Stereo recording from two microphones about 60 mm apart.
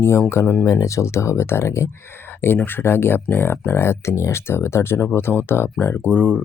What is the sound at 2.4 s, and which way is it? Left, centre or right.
Speech, left.